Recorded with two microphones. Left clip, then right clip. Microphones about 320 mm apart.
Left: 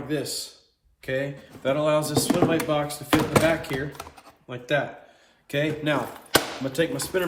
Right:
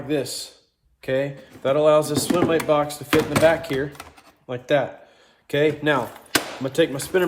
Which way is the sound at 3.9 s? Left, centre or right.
Centre.